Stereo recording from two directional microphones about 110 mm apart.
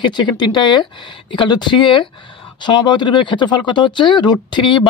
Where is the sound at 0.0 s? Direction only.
45° left (ahead or behind).